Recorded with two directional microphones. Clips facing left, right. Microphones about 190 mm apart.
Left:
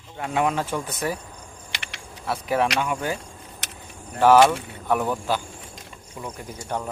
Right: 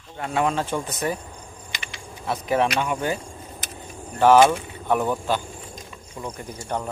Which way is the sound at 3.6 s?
70° left (ahead or behind).